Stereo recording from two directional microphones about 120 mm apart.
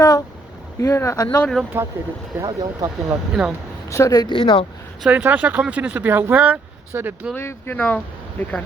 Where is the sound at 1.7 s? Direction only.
20° right (ahead or behind).